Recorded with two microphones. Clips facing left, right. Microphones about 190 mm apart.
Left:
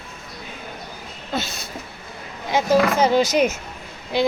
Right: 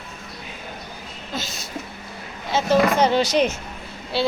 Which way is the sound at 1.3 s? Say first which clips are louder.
Left 4 dB; 60° left (ahead or behind).